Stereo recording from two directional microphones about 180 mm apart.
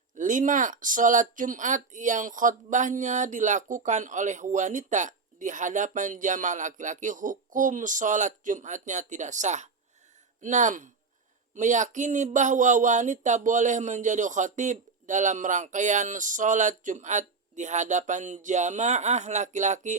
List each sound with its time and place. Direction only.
0.2 s speech: 45° right (ahead or behind)